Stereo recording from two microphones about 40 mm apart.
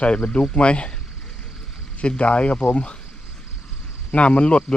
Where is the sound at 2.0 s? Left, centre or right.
Left.